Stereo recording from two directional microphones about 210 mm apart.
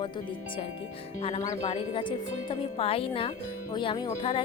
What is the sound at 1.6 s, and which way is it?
Speech, 25° left (ahead or behind).